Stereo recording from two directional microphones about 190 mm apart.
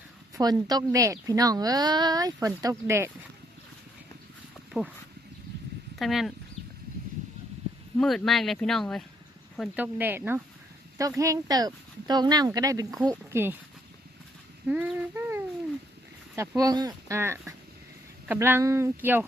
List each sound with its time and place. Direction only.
0.3 s a woman's voice: 20° right (ahead or behind)
6.0 s speech: centre (ahead or behind)
7.9 s speech: centre (ahead or behind)
9.6 s speech: 10° right (ahead or behind)
14.7 s speech: 10° right (ahead or behind)